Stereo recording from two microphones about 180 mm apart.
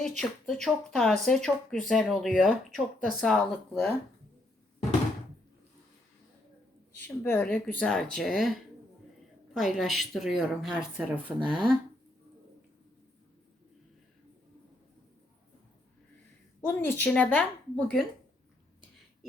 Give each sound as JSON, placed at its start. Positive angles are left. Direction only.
{"t": 0.2, "sound": "speech", "side_deg": 0}
{"t": 7.2, "sound": "speech", "side_deg": 10}
{"t": 9.6, "sound": "speech", "side_deg": 0}
{"t": 11.3, "sound": "speech", "side_deg": -25}
{"t": 16.6, "sound": "a woman's voice", "side_deg": 10}